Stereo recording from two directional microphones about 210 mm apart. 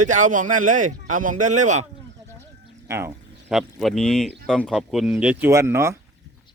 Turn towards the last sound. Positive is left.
turn(degrees=-15)  # may be behind; listen again after turning